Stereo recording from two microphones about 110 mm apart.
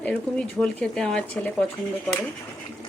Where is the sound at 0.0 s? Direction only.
10° left (ahead or behind).